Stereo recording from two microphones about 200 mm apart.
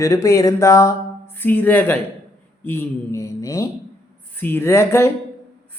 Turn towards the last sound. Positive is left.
turn(degrees=15)  # may be behind; listen again after turning